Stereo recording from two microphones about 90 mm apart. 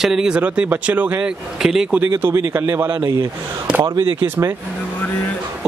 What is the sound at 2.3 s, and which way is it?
Speech, 25° right (ahead or behind).